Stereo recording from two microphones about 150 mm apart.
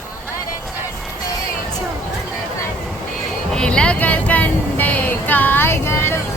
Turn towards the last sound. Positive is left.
turn(degrees=15)  # may be behind; listen again after turning